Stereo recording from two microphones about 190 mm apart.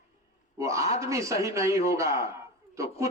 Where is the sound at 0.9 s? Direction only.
15° right (ahead or behind).